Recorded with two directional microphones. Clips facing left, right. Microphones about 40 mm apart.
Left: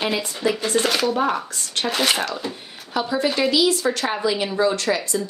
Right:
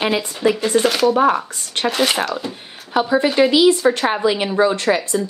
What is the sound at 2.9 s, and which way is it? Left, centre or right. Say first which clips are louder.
A woman's voice: right 5 dB; right.